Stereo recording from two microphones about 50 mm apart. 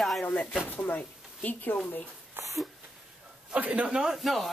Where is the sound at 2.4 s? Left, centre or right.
Right.